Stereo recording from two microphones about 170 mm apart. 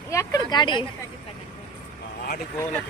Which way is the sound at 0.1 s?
20° left (ahead or behind).